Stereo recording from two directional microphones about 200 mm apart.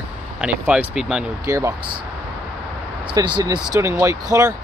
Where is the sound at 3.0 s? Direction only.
25° right (ahead or behind).